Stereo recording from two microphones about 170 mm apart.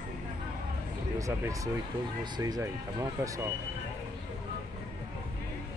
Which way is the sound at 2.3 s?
20° right (ahead or behind).